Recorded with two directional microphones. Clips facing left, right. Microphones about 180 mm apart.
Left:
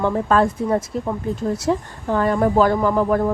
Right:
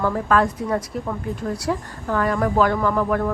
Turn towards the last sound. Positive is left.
turn(degrees=30)  # may be behind; listen again after turning